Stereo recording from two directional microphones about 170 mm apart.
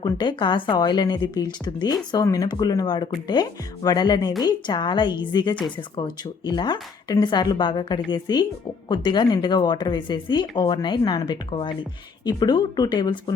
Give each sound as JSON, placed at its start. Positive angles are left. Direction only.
{"t": 0.0, "sound": "speech", "side_deg": 25}